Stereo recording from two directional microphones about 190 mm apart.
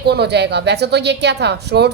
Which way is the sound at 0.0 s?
60° right (ahead or behind).